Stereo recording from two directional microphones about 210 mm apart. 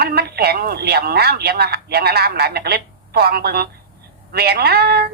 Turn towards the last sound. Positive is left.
turn(degrees=-50)  # may be behind; listen again after turning